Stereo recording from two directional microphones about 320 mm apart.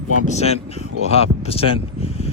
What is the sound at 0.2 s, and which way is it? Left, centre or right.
Speech, centre.